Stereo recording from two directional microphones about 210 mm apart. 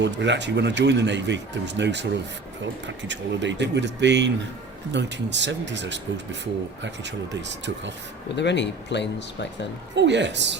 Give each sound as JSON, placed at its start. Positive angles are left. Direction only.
{"t": 0.0, "sound": "speech", "side_deg": -55}
{"t": 8.4, "sound": "speech", "side_deg": 55}
{"t": 9.9, "sound": "speech", "side_deg": -55}